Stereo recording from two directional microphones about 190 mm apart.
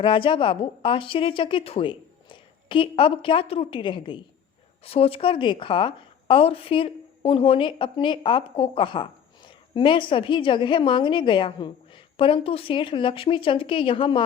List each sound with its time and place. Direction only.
0.0 s a woman's voice: 25° left (ahead or behind)